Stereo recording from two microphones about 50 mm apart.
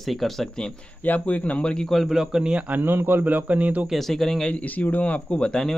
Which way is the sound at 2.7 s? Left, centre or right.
Right.